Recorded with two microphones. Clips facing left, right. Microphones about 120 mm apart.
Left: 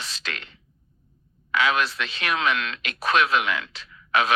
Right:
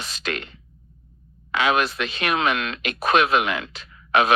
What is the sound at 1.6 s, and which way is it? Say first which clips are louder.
Speech: right 2 dB; 50° right (ahead or behind).